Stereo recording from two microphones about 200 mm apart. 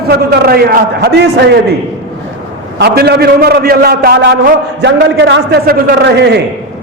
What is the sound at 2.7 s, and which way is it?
A man's voice, 55° right (ahead or behind).